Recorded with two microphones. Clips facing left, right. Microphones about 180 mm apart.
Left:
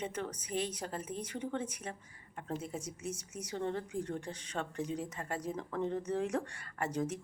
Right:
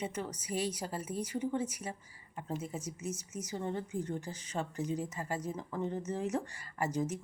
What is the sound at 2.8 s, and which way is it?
Speech, 30° left (ahead or behind).